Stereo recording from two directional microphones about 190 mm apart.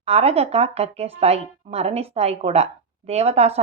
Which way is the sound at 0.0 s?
35° right (ahead or behind).